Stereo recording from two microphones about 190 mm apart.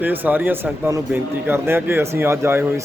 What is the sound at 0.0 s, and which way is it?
Speech, 10° right (ahead or behind).